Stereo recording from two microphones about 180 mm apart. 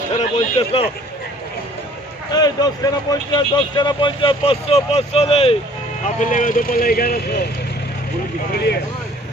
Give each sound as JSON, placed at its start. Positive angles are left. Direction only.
{"t": 0.2, "sound": "speech", "side_deg": 30}
{"t": 2.3, "sound": "speech", "side_deg": 20}